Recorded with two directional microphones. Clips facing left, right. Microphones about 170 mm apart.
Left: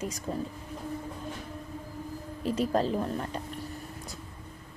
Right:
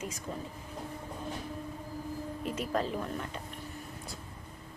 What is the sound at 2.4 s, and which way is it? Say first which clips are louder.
Speech: left 6 dB; 30° left (ahead or behind).